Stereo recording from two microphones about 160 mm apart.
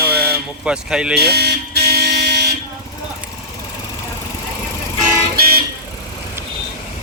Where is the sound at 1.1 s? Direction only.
90° right.